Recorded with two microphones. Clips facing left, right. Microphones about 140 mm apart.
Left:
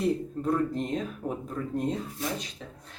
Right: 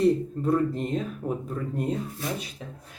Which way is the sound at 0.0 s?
Centre (ahead or behind).